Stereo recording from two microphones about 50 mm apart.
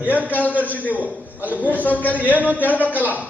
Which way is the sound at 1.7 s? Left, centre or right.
Left.